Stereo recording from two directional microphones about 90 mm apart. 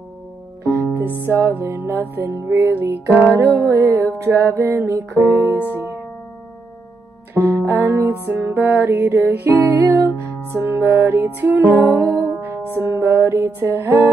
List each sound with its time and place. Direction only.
0.9 s music: 25° right (ahead or behind)
4.7 s music: 40° right (ahead or behind)
7.3 s music: 30° right (ahead or behind)